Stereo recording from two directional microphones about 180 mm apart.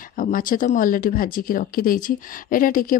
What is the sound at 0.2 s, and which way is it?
Speech, 50° left (ahead or behind).